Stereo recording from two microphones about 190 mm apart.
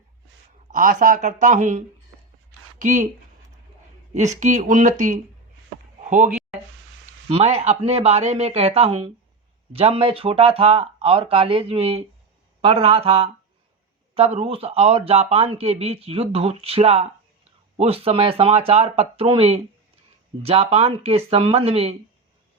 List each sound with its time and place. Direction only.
0.7 s speech: 45° right (ahead or behind)
4.1 s speech: 40° right (ahead or behind)
7.3 s speech: 30° right (ahead or behind)